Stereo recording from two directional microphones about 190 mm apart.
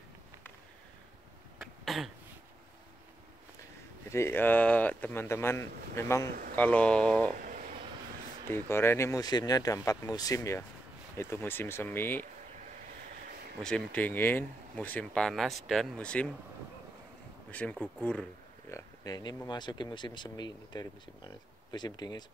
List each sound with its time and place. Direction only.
1.6 s a sound: centre (ahead or behind)
4.1 s speech: 10° left (ahead or behind)
7.3 s a sound: 45° right (ahead or behind)
8.5 s speech: 15° left (ahead or behind)
13.6 s speech: 5° left (ahead or behind)
17.5 s speech: 5° left (ahead or behind)
18.7 s speech: 20° left (ahead or behind)